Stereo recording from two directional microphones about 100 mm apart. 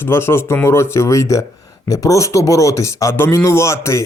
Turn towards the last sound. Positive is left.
turn(degrees=30)  # may be behind; listen again after turning